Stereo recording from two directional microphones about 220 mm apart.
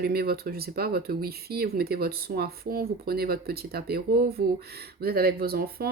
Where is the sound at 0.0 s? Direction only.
45° right (ahead or behind).